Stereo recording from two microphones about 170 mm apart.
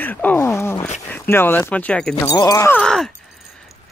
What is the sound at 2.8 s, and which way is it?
Speech, 5° left (ahead or behind).